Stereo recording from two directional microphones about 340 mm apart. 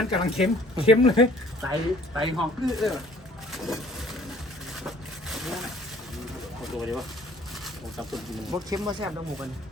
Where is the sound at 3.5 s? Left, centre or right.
Centre.